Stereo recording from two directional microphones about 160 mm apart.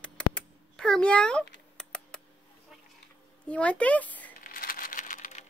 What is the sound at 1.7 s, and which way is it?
Typing, 5° left (ahead or behind).